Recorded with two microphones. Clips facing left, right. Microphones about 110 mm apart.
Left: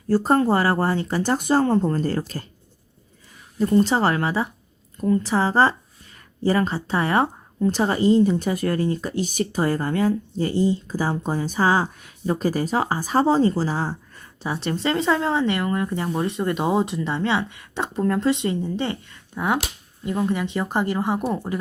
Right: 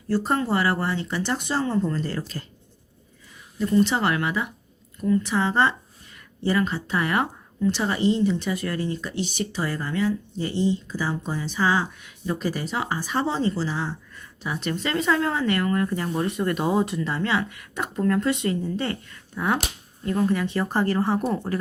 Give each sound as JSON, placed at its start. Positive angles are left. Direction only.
{"t": 0.1, "sound": "speech", "side_deg": 40}
{"t": 3.6, "sound": "speech", "side_deg": 35}